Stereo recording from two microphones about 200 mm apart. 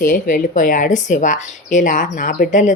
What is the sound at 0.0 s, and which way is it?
Speech, 40° left (ahead or behind).